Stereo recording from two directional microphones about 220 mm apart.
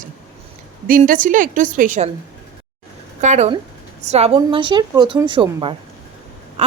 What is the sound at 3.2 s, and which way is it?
A woman's voice, 30° right (ahead or behind).